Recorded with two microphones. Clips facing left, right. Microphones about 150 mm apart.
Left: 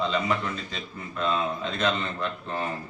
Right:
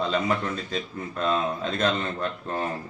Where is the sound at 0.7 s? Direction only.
40° right (ahead or behind).